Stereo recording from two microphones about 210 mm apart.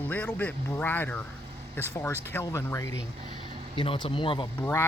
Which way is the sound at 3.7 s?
25° left (ahead or behind).